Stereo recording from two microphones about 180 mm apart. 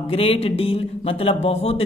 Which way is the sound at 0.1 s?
35° left (ahead or behind).